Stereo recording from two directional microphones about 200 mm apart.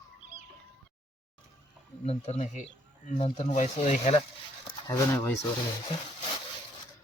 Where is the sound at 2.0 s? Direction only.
35° left (ahead or behind).